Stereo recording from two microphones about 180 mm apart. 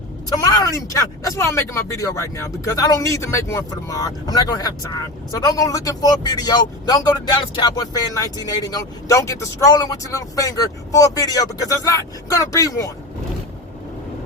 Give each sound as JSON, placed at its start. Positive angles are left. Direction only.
{"t": 0.3, "sound": "speech", "side_deg": 20}